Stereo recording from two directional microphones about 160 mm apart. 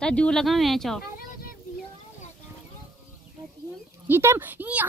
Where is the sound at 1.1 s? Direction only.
65° left (ahead or behind).